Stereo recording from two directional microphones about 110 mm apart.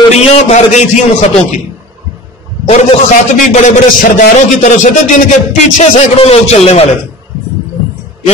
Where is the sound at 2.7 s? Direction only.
90° left.